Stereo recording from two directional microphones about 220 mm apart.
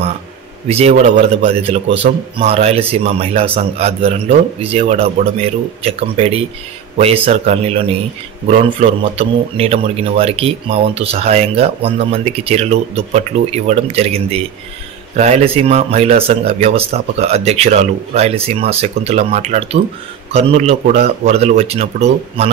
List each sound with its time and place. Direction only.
0.7 s a man's voice: 30° right (ahead or behind)